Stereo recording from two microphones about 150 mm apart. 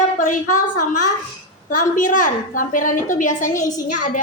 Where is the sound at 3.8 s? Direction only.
55° left (ahead or behind).